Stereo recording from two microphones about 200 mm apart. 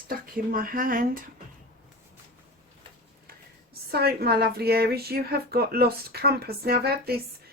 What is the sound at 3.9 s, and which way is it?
Speech, 50° right (ahead or behind).